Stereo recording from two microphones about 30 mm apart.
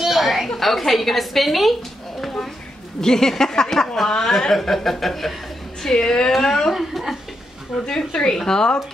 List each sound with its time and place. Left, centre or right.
0.0 s a sound: centre
0.6 s a woman's voice: centre
3.0 s a woman's voice: centre
5.8 s a woman's voice: centre
6.7 s a woman's voice: centre
8.1 s a woman's voice: left